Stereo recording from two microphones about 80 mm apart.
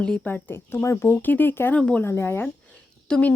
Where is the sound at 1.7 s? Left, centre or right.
Centre.